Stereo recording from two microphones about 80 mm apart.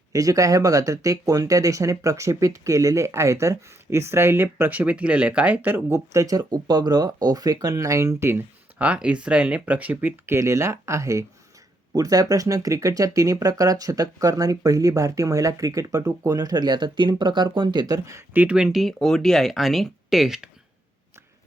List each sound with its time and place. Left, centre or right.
0.1 s speech: right
6.1 s speech: right
8.8 s speech: centre; by 18.1 s right
18.3 s speech: centre
18.7 s speech: centre